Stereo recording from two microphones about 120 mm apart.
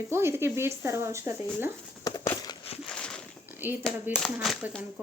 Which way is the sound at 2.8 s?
5° left (ahead or behind).